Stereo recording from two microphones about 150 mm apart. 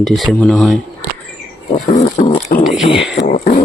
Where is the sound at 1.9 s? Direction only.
50° left (ahead or behind).